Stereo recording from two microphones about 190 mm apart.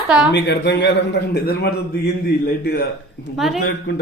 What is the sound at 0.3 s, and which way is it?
A man's voice, 65° left (ahead or behind).